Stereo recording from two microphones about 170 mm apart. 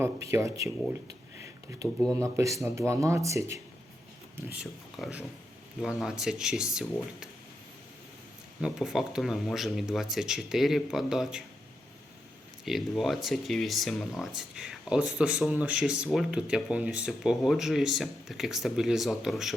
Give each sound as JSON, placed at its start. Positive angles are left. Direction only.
{"t": 0.0, "sound": "speech", "side_deg": -15}
{"t": 2.1, "sound": "speech", "side_deg": -15}
{"t": 4.6, "sound": "speech", "side_deg": 0}
{"t": 8.6, "sound": "speech", "side_deg": 0}
{"t": 12.6, "sound": "speech", "side_deg": 0}